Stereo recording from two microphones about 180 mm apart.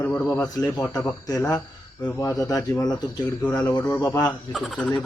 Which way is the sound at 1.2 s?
20° left (ahead or behind).